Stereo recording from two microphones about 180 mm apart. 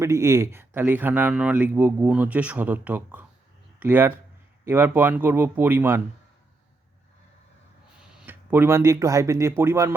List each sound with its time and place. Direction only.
0.0 s speech: 15° right (ahead or behind)
8.1 s speech: 10° right (ahead or behind)